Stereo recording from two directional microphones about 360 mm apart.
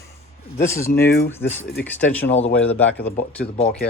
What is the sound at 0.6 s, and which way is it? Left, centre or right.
Speech, centre.